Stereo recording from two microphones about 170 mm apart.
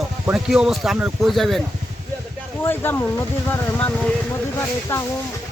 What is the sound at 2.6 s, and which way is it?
Speech, 10° left (ahead or behind).